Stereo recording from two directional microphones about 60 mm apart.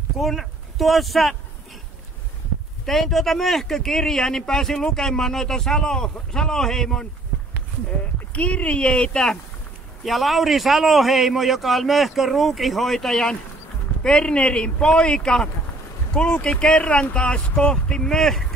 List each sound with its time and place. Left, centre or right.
0.2 s speech: centre
2.8 s speech: centre
8.3 s speech: left
10.0 s a man's voice: centre